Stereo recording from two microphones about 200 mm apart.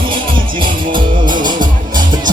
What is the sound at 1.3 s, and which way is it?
Music, 40° right (ahead or behind).